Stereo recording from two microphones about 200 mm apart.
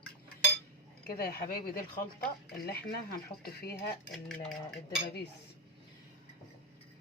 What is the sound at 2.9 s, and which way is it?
Speech, 50° left (ahead or behind).